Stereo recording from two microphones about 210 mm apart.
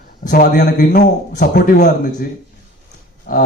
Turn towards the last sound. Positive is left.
turn(degrees=45)  # may be behind; listen again after turning